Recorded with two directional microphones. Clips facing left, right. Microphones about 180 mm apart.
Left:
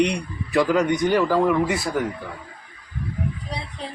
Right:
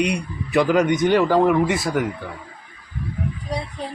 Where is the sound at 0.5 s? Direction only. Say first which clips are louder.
Right 2 dB; 20° right (ahead or behind).